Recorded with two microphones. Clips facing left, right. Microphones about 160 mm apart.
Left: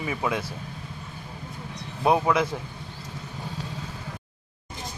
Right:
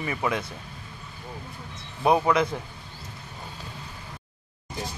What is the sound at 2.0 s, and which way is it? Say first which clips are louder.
Speech: even; 5° left (ahead or behind).